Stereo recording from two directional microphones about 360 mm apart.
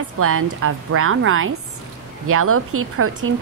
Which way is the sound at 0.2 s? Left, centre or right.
Right.